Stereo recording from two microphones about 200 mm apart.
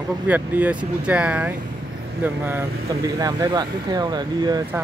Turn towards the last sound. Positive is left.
turn(degrees=-20)  # may be behind; listen again after turning